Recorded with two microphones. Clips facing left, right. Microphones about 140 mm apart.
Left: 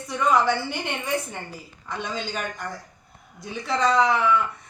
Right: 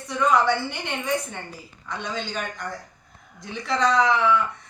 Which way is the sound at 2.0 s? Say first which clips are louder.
Even; 5° left (ahead or behind).